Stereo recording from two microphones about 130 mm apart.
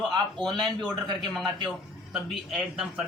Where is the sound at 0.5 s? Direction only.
35° right (ahead or behind).